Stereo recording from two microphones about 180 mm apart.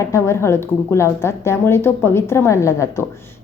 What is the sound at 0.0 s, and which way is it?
A woman's voice, 15° left (ahead or behind).